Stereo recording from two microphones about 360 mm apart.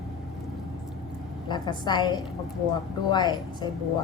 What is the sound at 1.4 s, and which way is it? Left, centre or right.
A woman's voice, centre.